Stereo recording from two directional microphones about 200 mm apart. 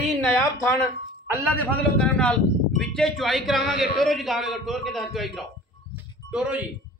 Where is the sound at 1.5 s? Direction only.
5° left (ahead or behind).